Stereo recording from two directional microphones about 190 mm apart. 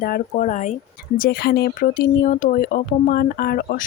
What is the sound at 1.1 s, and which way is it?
Speech, 55° left (ahead or behind).